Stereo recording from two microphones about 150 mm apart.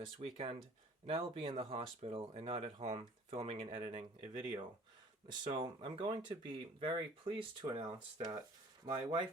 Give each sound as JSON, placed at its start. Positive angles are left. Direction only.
{"t": 0.2, "sound": "speech", "side_deg": -45}